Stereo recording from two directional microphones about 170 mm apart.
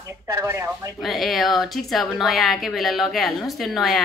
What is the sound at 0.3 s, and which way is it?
Speech, 15° right (ahead or behind).